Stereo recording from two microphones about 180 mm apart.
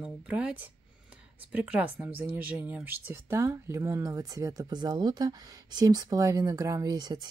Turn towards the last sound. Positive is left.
turn(degrees=-20)  # may be behind; listen again after turning